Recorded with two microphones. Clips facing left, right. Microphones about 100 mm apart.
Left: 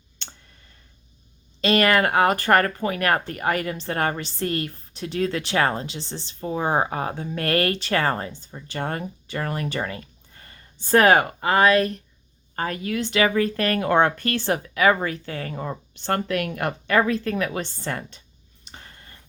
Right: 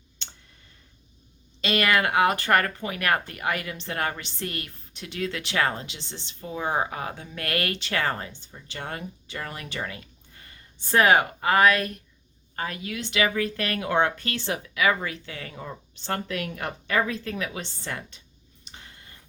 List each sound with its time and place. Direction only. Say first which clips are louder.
1.6 s speech: left 4 dB; 40° left (ahead or behind)
12.5 s speech: left 6 dB; 40° left (ahead or behind)
18.6 s a sound: left 3 dB; 45° left (ahead or behind)